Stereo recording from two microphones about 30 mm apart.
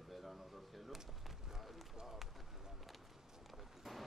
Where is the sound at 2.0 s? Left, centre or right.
Centre.